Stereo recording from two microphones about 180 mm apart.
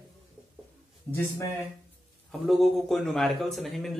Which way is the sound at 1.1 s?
15° left (ahead or behind).